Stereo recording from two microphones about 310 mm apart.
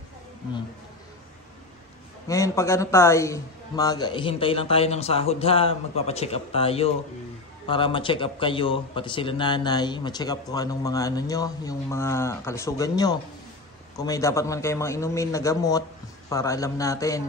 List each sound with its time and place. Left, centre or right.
2.2 s a man's voice: centre